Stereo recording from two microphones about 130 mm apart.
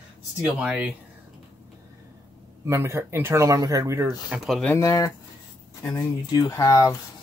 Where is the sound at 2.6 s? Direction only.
20° right (ahead or behind).